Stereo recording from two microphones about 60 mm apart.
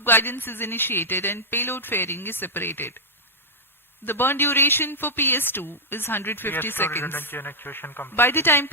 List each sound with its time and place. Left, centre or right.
0.0 s speech: left
4.0 s speech: left